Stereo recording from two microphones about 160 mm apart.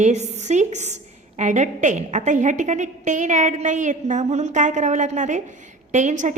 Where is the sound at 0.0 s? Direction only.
45° right (ahead or behind).